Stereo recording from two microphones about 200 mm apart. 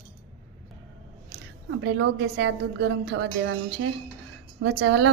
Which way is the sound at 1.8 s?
65° right (ahead or behind).